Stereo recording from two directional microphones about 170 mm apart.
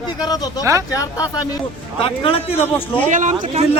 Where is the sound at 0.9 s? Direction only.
20° left (ahead or behind).